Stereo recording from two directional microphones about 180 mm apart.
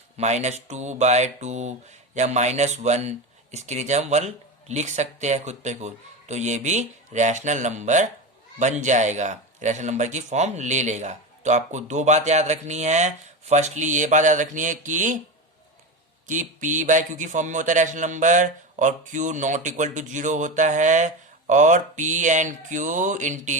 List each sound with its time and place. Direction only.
0.2 s speech: 40° right (ahead or behind)
16.4 s a man's voice: 45° right (ahead or behind)